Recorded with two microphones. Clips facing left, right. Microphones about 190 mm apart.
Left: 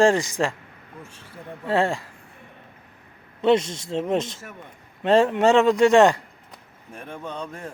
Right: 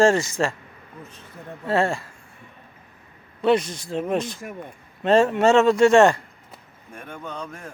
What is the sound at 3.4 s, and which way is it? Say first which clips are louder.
Speech: left 1 dB; 25° left (ahead or behind).